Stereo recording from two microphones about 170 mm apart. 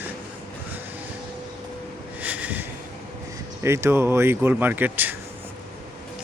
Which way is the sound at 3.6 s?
15° right (ahead or behind).